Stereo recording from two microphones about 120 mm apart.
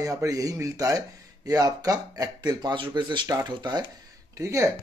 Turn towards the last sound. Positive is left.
turn(degrees=-25)  # may be behind; listen again after turning